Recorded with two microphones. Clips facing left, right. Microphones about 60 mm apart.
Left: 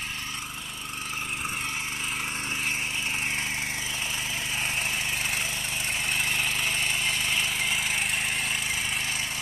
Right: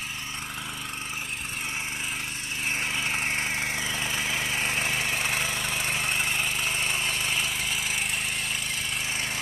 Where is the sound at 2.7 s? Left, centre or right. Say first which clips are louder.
Right 2 dB; right.